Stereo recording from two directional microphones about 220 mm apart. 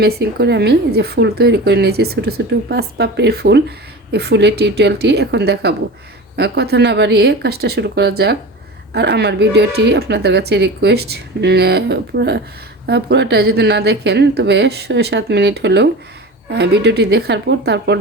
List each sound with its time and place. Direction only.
0.0 s a woman's voice: 45° right (ahead or behind)